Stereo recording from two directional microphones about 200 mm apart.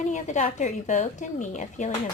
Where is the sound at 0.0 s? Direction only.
40° left (ahead or behind).